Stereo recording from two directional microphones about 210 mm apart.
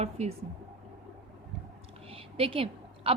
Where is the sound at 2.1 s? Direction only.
25° right (ahead or behind).